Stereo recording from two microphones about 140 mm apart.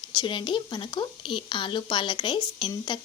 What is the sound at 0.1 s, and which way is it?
Speech, 35° left (ahead or behind).